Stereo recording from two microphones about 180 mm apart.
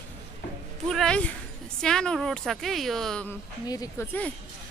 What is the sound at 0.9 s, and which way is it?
Speech, 5° left (ahead or behind).